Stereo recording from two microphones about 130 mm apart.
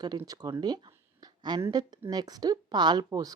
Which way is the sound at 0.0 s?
30° right (ahead or behind).